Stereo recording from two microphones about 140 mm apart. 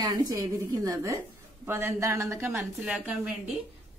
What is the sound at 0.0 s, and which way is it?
Speech, 30° right (ahead or behind).